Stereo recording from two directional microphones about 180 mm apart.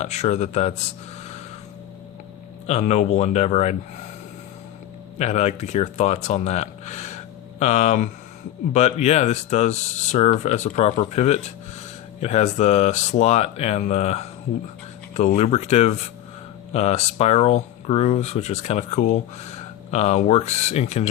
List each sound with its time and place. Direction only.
0.0 s speech: 40° left (ahead or behind)
2.6 s speech: 35° left (ahead or behind)
5.1 s speech: 40° left (ahead or behind)
15.4 s speech: 35° left (ahead or behind)